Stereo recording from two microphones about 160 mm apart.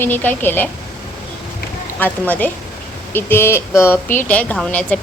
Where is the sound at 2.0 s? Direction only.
10° left (ahead or behind).